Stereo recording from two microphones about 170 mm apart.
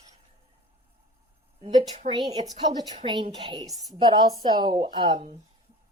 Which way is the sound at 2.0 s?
25° right (ahead or behind).